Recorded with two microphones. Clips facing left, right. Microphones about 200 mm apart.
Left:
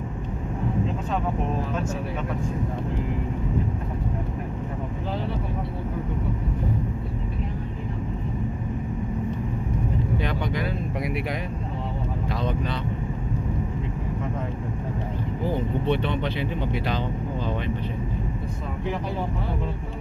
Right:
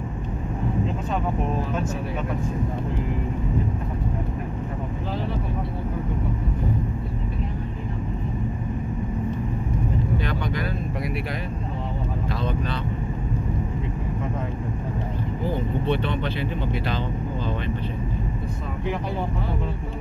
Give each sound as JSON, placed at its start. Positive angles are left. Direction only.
{"t": 10.2, "sound": "vehicle", "side_deg": 20}
{"t": 15.9, "sound": "speech", "side_deg": 20}